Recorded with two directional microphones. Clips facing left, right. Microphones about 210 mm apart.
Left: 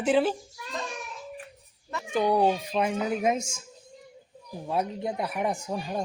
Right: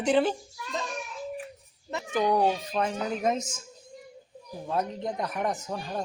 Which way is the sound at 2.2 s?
10° left (ahead or behind).